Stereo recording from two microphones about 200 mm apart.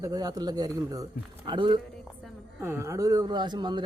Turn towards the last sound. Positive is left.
turn(degrees=-20)  # may be behind; listen again after turning